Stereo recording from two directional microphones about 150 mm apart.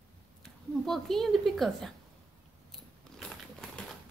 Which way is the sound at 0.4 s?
Centre (ahead or behind).